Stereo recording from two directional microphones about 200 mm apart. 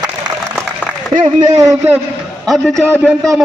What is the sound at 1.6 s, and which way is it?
Speech, 15° right (ahead or behind).